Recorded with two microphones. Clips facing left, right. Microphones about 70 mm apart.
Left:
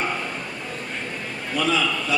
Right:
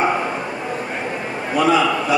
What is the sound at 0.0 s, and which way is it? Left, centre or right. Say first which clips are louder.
Bow-wow: right 8 dB; right.